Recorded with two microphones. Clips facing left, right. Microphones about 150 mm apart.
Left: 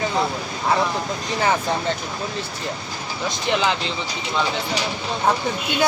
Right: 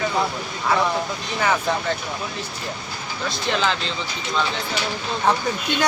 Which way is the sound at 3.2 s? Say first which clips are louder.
Left 2 dB; 15° left (ahead or behind).